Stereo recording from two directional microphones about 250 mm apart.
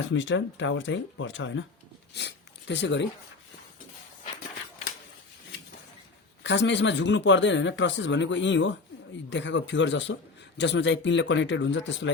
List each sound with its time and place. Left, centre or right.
0.0 s speech: left
6.4 s speech: left